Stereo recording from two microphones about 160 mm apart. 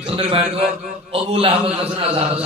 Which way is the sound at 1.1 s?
35° right (ahead or behind).